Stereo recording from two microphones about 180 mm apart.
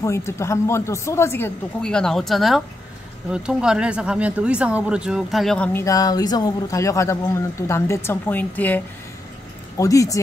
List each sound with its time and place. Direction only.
0.0 s speech: 15° left (ahead or behind)